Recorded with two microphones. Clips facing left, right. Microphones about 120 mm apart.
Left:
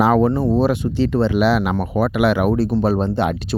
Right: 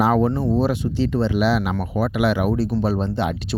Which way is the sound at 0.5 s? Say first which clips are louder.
Left 3 dB; 65° left (ahead or behind).